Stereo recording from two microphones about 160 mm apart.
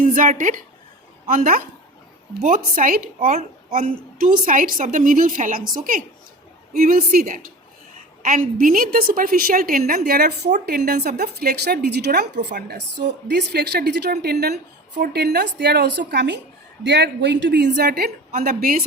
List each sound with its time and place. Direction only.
0.0 s speech: 60° right (ahead or behind)
2.4 s a woman's voice: 55° right (ahead or behind); by 18.1 s 70° right (ahead or behind)
18.3 s a woman's voice: 50° right (ahead or behind)